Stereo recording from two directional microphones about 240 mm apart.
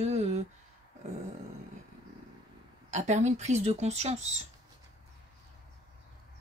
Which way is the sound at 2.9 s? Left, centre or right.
Right.